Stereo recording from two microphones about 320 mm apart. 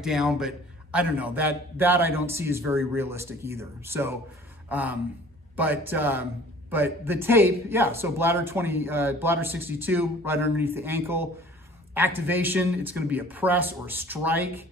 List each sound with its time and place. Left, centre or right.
0.0 s speech: centre
4.6 s a sound: centre
5.6 s speech: centre